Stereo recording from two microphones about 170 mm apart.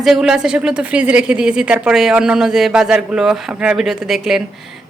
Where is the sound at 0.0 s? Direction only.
Centre (ahead or behind).